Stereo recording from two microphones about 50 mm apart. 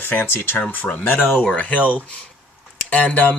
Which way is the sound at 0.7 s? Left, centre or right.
Left.